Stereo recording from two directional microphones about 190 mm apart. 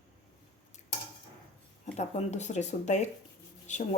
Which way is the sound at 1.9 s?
35° left (ahead or behind).